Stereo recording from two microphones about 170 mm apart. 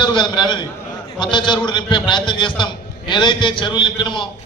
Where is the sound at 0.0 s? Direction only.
30° left (ahead or behind).